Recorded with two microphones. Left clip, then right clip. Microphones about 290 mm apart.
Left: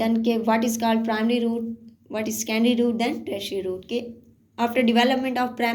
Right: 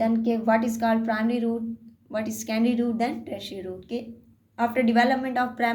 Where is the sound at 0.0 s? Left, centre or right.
Right.